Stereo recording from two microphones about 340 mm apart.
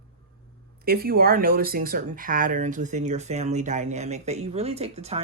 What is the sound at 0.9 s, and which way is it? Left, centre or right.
Speech, right.